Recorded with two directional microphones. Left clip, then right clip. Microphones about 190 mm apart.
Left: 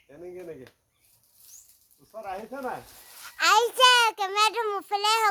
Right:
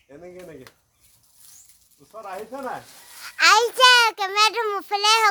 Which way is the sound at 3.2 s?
10° right (ahead or behind).